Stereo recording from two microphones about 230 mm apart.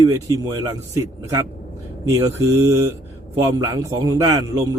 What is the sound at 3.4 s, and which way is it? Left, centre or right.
A man's voice, centre.